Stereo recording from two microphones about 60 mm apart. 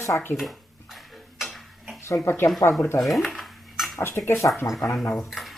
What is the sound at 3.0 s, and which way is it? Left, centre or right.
Dishes, centre.